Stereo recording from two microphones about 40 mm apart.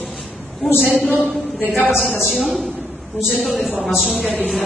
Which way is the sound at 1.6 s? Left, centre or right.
Left.